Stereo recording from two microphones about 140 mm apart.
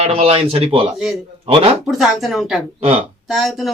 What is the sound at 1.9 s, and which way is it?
Speech, centre (ahead or behind).